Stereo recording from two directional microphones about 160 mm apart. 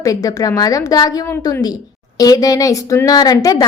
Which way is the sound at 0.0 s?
20° left (ahead or behind).